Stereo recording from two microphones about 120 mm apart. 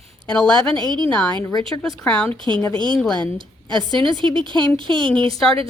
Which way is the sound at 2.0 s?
10° left (ahead or behind).